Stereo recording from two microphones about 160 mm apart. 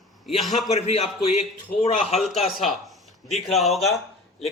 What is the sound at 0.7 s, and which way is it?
A man's voice, 40° left (ahead or behind).